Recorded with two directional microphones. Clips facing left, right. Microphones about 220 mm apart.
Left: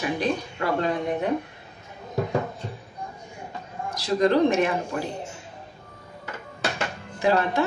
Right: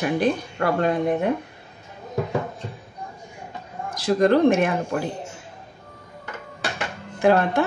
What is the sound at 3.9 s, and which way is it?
Speech, 50° right (ahead or behind).